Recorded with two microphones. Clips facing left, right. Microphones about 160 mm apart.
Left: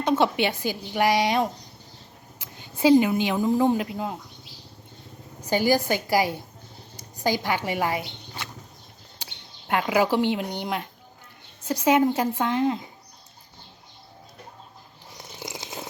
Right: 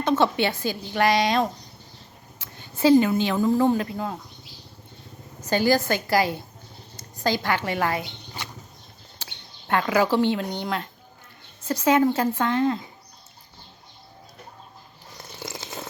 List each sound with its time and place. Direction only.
0.0 s a woman's voice: 15° left (ahead or behind)
5.4 s a woman's voice: 15° left (ahead or behind)
15.2 s a sound: 15° left (ahead or behind)